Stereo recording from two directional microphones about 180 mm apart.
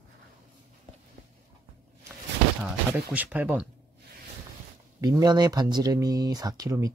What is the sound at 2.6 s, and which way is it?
Speech, 10° right (ahead or behind).